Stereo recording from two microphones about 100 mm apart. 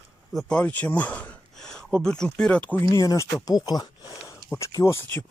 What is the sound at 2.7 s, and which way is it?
Speech, 35° left (ahead or behind).